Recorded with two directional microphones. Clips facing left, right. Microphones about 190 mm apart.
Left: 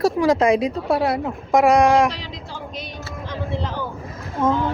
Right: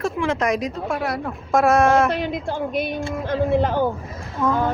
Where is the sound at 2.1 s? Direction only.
55° right (ahead or behind).